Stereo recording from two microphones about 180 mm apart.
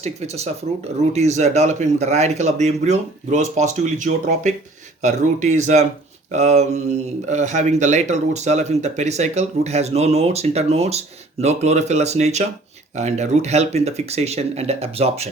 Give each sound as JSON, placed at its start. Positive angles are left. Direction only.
{"t": 0.0, "sound": "speech", "side_deg": -35}